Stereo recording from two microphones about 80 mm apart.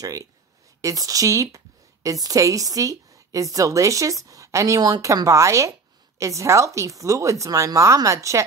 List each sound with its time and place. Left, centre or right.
0.0 s a woman's voice: right